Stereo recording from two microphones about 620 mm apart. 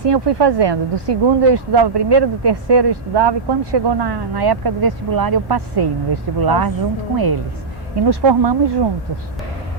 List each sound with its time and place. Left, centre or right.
0.0 s speech: right
7.9 s speech: right